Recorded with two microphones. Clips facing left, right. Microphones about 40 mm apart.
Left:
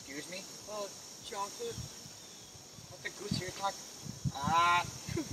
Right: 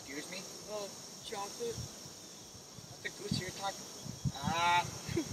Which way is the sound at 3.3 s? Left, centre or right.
Centre.